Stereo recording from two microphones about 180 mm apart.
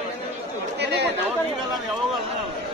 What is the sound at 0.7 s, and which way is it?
Chatter, 70° right (ahead or behind).